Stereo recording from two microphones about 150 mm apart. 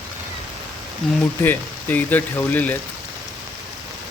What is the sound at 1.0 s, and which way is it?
Speech, centre (ahead or behind).